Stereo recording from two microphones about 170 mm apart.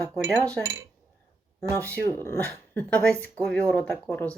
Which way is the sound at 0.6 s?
15° right (ahead or behind).